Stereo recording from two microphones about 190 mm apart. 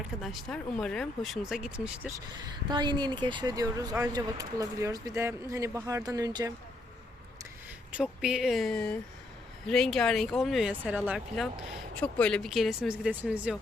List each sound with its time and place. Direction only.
0.2 s speech: centre (ahead or behind)
2.6 s speech: 25° right (ahead or behind)
7.9 s speech: 5° right (ahead or behind)
11.9 s speech: 5° left (ahead or behind)